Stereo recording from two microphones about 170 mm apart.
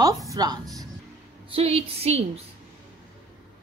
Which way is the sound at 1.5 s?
35° right (ahead or behind).